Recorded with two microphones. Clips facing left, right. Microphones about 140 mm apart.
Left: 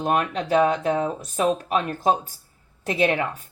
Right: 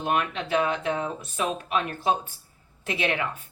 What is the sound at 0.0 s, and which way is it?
Speech, 40° left (ahead or behind).